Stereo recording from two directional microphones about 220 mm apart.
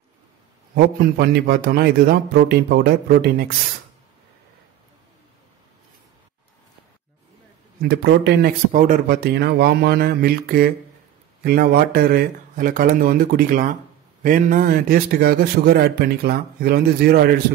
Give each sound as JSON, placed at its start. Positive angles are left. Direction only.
{"t": 0.7, "sound": "a man's voice", "side_deg": -45}
{"t": 7.8, "sound": "a man's voice", "side_deg": -50}